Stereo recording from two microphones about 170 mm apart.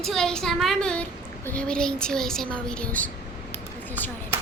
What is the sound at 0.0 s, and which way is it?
Speech, centre (ahead or behind).